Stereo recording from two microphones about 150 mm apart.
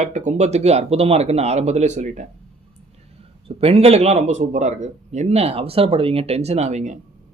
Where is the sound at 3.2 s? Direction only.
40° right (ahead or behind).